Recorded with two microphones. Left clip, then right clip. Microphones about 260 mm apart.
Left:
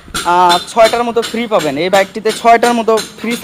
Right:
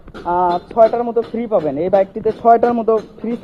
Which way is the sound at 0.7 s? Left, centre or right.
Left.